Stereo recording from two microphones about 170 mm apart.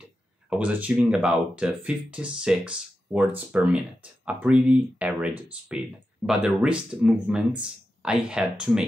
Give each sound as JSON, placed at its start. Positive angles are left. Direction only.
{"t": 0.0, "sound": "speech", "side_deg": -10}